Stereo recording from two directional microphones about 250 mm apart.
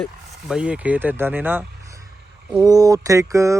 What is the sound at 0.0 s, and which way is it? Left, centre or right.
Speech, centre.